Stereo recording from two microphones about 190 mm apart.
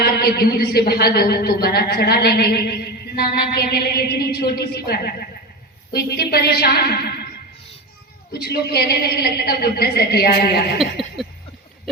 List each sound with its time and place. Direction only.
0.0 s a man's voice: 55° left (ahead or behind)
8.3 s a man's voice: 55° left (ahead or behind)
10.8 s a sound: centre (ahead or behind)